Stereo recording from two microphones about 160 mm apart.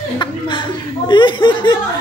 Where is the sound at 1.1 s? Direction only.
30° left (ahead or behind).